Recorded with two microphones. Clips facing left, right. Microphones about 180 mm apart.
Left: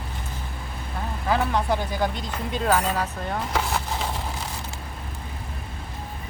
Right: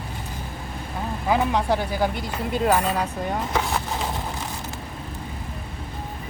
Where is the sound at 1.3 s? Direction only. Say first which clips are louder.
Right 2 dB; 15° right (ahead or behind).